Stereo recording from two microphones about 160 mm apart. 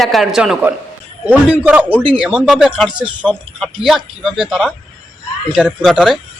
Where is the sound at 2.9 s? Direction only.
30° right (ahead or behind).